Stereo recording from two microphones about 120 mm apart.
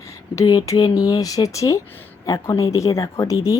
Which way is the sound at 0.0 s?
25° left (ahead or behind).